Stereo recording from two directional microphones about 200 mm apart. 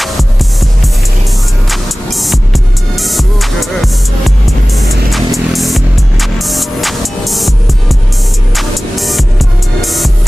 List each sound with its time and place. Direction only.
1.7 s music: centre (ahead or behind)
8.5 s music: centre (ahead or behind)